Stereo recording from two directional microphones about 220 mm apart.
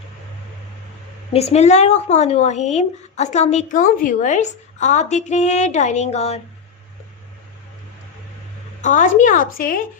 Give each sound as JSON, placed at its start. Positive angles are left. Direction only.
{"t": 1.3, "sound": "a woman's voice", "side_deg": 30}
{"t": 8.8, "sound": "a woman's voice", "side_deg": 35}